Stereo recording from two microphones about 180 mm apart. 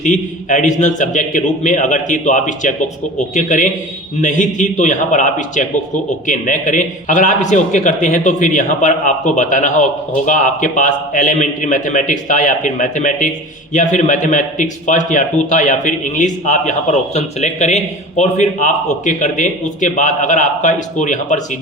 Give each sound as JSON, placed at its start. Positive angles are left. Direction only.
{"t": 0.0, "sound": "speech", "side_deg": 45}